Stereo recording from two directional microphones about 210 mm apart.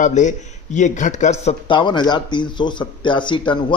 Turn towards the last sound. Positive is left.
turn(degrees=20)  # may be behind; listen again after turning